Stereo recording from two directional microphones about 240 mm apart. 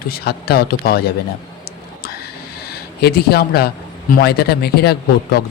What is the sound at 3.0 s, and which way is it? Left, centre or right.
Speech, left.